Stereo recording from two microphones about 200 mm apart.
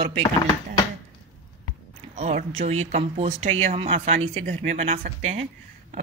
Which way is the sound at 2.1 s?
35° right (ahead or behind).